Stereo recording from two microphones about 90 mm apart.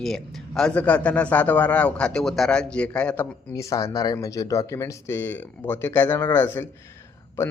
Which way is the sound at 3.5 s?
35° left (ahead or behind).